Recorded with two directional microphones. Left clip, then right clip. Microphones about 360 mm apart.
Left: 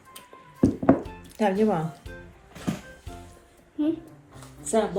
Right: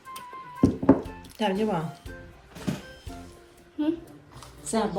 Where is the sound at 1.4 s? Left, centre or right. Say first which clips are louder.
Left 3 dB; centre.